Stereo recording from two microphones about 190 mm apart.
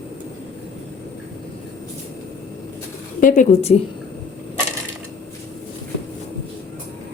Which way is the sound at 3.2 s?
40° left (ahead or behind).